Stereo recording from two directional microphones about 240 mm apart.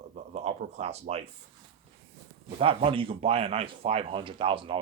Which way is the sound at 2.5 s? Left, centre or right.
Right.